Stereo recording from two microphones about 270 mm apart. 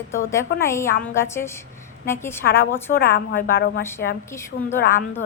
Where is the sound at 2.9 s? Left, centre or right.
Left.